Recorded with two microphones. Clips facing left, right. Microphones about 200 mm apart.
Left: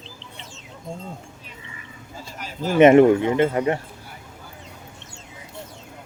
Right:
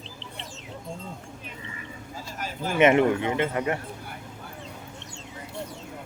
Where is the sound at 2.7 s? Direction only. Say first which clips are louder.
Left 7 dB; 40° left (ahead or behind).